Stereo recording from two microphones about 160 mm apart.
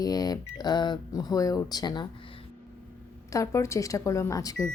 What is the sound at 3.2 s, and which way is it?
Speech, 20° left (ahead or behind).